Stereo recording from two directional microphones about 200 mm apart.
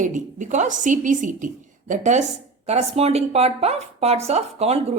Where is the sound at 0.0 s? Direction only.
40° right (ahead or behind).